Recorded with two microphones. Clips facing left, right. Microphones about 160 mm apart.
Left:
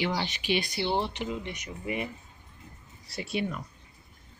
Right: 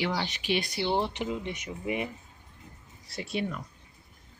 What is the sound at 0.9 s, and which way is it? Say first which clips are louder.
Speech: right 1 dB; 15° right (ahead or behind).